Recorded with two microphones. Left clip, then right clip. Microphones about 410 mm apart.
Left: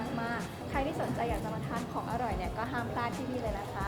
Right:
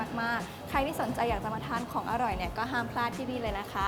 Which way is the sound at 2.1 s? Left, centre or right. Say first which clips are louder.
Right 4 dB; right.